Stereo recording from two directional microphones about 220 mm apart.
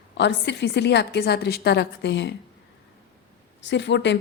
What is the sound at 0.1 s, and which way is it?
A woman's voice, 50° left (ahead or behind).